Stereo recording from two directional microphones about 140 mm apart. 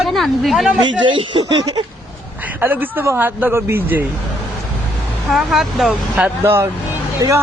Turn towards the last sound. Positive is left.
turn(degrees=-25)  # may be behind; listen again after turning